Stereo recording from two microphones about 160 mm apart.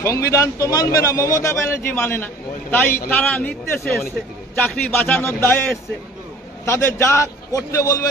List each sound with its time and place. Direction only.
0.0 s a man's voice: 20° left (ahead or behind)